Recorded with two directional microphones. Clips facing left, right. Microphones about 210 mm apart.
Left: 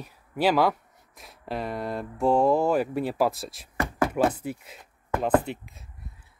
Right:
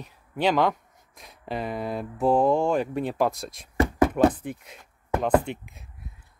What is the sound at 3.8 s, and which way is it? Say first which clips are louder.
Knock: right 4 dB; 20° right (ahead or behind).